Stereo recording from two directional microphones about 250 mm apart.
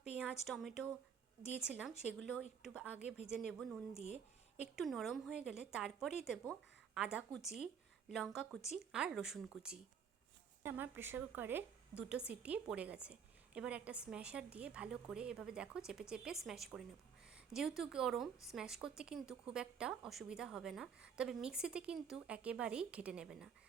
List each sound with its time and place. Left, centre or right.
0.2 s a woman's voice: centre
3.9 s speech: left
4.6 s a woman's voice: centre